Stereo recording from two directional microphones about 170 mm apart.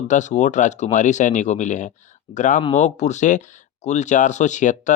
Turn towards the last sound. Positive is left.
turn(degrees=45)  # may be behind; listen again after turning